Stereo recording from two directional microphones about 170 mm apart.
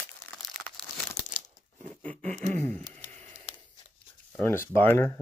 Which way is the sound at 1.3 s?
45° left (ahead or behind).